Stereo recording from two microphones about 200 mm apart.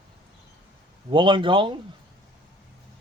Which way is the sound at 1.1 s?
25° right (ahead or behind).